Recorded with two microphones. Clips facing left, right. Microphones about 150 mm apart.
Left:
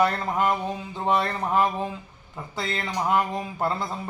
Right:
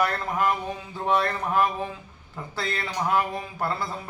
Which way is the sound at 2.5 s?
20° left (ahead or behind).